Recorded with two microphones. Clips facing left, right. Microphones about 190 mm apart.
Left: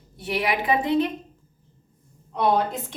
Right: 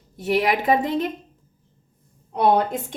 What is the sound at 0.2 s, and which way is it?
Speech, 45° right (ahead or behind).